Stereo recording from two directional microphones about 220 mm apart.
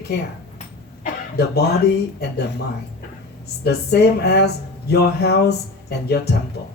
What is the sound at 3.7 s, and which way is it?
Speech, 50° left (ahead or behind).